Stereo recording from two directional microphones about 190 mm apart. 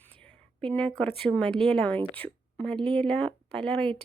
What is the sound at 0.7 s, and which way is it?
Speech, 10° left (ahead or behind).